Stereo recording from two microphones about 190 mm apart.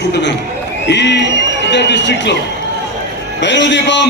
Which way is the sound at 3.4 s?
70° left (ahead or behind).